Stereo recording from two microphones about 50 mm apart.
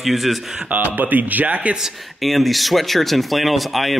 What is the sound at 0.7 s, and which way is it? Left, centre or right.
Speech, right.